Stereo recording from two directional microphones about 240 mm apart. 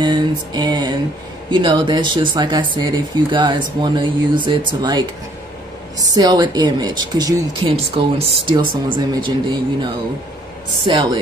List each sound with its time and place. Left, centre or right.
0.0 s a sound: centre
1.5 s speech: centre
10.9 s speech: centre